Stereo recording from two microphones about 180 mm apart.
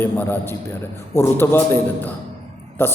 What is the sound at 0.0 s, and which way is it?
A man's voice, 10° left (ahead or behind).